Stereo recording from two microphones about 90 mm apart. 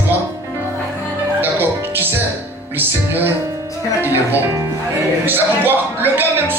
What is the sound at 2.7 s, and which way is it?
Speech, 20° right (ahead or behind).